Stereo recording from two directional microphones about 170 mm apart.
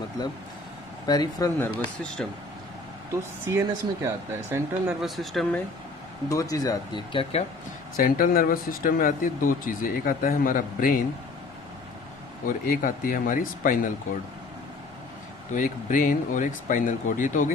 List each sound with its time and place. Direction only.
1.0 s speech: 25° left (ahead or behind)
1.6 s speech: 5° left (ahead or behind)
3.4 s speech: 15° right (ahead or behind)
5.0 s speech: centre (ahead or behind)
6.2 s speech: 20° left (ahead or behind)
7.9 s speech: 55° left (ahead or behind)
12.4 s speech: 55° left (ahead or behind)
15.5 s speech: 50° left (ahead or behind)